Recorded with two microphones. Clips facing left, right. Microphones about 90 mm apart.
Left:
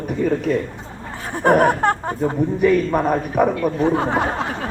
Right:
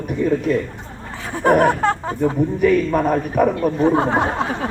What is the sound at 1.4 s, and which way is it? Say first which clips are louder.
A man's voice: even; 20° left (ahead or behind).